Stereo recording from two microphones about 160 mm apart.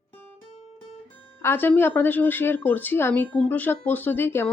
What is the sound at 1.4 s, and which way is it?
A woman's voice, 15° left (ahead or behind).